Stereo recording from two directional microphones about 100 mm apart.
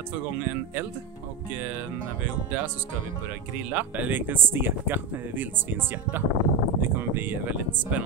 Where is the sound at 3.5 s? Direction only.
15° right (ahead or behind).